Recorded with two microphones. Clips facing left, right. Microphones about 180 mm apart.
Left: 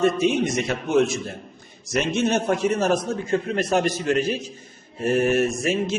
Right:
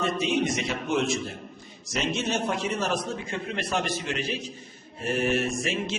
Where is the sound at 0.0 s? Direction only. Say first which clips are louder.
Left 6 dB; 50° left (ahead or behind).